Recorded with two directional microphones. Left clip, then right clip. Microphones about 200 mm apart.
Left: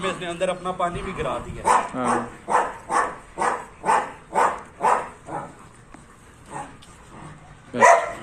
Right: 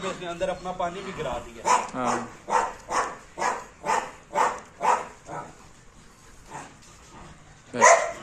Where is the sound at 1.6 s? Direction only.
60° left (ahead or behind).